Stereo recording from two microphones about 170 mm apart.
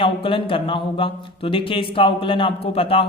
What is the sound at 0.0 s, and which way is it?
Speech, 30° left (ahead or behind).